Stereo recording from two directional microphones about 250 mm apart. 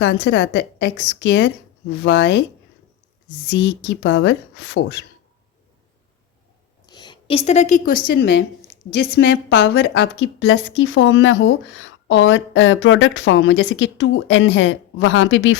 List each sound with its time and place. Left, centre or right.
0.0 s a woman's voice: left
3.5 s a woman's voice: left
6.8 s a woman's voice: centre; by 15.5 s left